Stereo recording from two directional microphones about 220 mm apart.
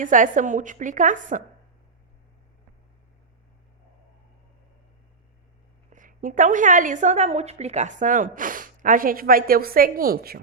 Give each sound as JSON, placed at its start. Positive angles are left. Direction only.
{"t": 0.0, "sound": "a woman's voice", "side_deg": -35}
{"t": 5.9, "sound": "a woman's voice", "side_deg": -35}